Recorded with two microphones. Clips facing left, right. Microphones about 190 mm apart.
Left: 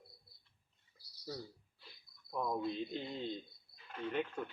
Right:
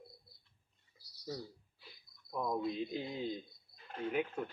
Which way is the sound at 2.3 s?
Centre (ahead or behind).